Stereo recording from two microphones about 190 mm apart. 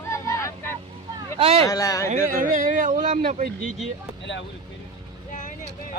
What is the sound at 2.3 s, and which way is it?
Speech, 45° right (ahead or behind).